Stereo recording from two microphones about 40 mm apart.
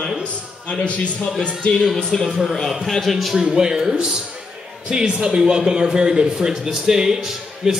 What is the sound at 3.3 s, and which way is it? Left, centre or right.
A man's voice, centre.